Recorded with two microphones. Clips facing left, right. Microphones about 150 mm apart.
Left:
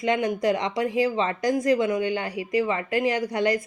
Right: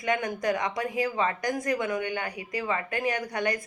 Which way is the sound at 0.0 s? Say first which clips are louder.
Left 5 dB; 25° left (ahead or behind).